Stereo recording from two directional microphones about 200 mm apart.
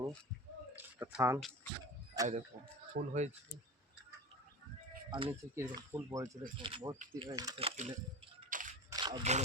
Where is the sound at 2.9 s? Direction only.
50° right (ahead or behind).